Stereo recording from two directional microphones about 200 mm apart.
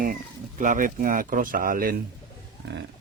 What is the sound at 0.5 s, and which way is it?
Speech, 40° right (ahead or behind).